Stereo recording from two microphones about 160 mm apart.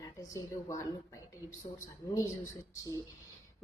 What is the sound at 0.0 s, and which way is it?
A woman's voice, 20° left (ahead or behind).